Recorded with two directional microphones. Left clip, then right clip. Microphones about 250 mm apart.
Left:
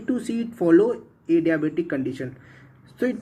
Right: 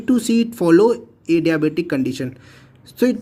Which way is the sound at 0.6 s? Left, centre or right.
Right.